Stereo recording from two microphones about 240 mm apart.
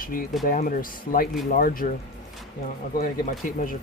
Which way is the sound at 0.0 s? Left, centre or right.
Left.